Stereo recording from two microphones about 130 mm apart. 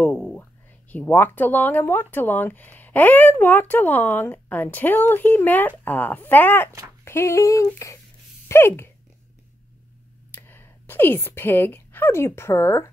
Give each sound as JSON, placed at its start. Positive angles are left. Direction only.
{"t": 0.0, "sound": "speech", "side_deg": 10}
{"t": 7.1, "sound": "a sound", "side_deg": 20}
{"t": 10.3, "sound": "speech", "side_deg": 15}